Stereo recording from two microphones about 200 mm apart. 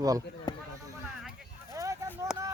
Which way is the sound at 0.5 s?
20° left (ahead or behind).